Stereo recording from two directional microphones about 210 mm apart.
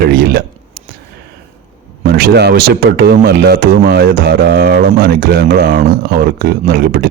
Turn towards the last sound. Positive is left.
turn(degrees=-45)  # may be behind; listen again after turning